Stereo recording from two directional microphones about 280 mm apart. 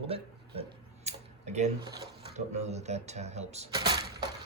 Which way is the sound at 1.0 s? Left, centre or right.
Right.